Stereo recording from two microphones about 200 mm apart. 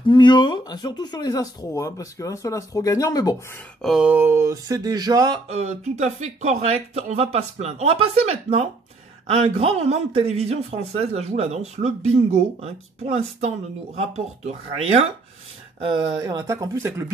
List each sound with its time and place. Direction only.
0.0 s speech: 25° left (ahead or behind)
3.8 s speech: 5° right (ahead or behind); by 5.4 s 20° right (ahead or behind)
5.5 s a man's voice: 30° right (ahead or behind)
15.9 s speech: 20° right (ahead or behind)